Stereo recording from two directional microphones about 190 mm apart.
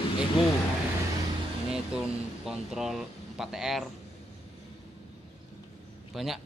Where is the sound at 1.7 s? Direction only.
5° right (ahead or behind).